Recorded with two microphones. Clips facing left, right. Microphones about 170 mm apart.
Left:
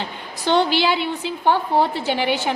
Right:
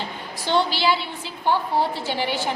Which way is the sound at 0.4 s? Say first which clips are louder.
Left 3 dB; 60° left (ahead or behind).